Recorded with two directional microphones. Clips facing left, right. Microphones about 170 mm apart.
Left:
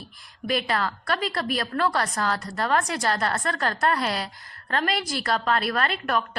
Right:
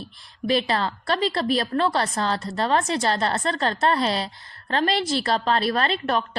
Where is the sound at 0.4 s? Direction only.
30° right (ahead or behind).